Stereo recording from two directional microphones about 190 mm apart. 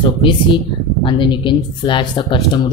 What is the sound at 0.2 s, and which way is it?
Speech, 25° left (ahead or behind).